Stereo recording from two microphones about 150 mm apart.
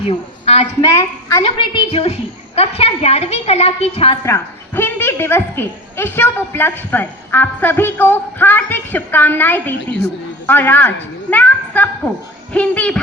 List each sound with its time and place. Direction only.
0.0 s a woman's voice: 40° left (ahead or behind)
0.8 s a woman's voice: 20° left (ahead or behind)
1.4 s a woman's voice: 35° left (ahead or behind)
4.2 s a woman's voice: 20° left (ahead or behind)